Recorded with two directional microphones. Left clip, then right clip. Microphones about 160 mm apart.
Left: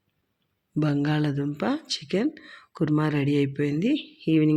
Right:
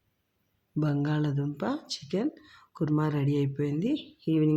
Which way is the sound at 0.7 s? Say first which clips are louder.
Left 5 dB; 15° left (ahead or behind).